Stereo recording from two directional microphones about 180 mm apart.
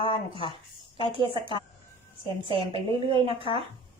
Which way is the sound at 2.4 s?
30° right (ahead or behind).